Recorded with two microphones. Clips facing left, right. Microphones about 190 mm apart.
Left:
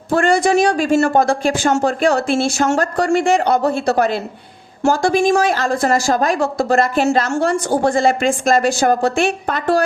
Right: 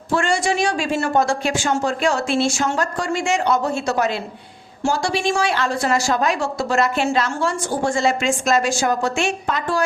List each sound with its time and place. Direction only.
0.1 s a woman's voice: 55° left (ahead or behind)
4.9 s a woman's voice: 45° left (ahead or behind)